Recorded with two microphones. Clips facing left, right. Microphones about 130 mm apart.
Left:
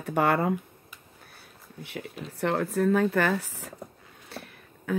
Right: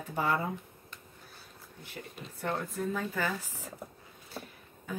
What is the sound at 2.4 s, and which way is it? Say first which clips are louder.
Speech: left 9 dB; 85° left.